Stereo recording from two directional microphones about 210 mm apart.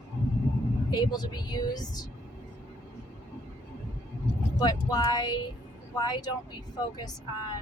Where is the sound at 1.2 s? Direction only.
20° left (ahead or behind).